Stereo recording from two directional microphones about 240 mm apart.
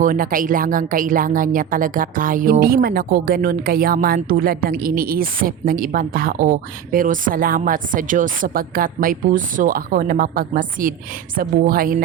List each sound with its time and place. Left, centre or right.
0.0 s speech: right